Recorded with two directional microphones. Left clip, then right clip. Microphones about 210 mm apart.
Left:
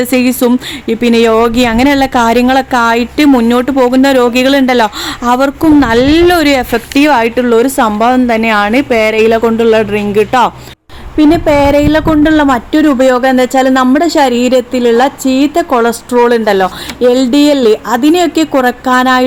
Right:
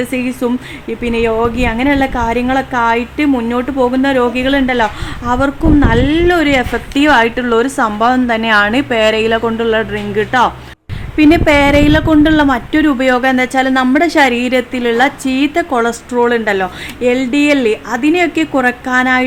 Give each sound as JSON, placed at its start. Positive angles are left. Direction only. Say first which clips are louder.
{"t": 0.0, "sound": "speech", "louder": "left 7 dB", "side_deg": 40}
{"t": 11.2, "sound": "a woman's voice", "louder": "left 1 dB", "side_deg": 10}